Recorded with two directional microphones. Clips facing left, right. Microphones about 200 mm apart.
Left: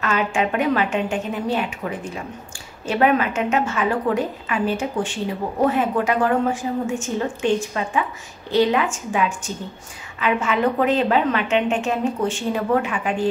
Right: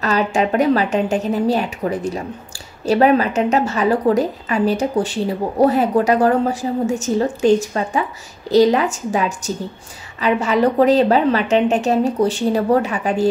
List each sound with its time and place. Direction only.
0.0 s a woman's voice: 35° right (ahead or behind)